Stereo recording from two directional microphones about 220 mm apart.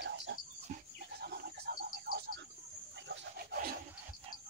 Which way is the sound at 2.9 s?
55° right (ahead or behind).